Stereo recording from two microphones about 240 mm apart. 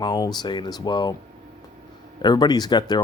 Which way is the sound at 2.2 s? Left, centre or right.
Centre.